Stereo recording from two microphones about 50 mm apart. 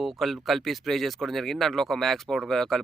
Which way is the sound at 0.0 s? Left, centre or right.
Centre.